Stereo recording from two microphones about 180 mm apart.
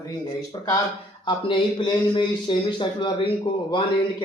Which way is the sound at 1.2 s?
25° left (ahead or behind).